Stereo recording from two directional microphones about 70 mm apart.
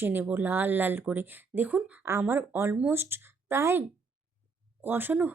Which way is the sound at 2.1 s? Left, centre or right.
Right.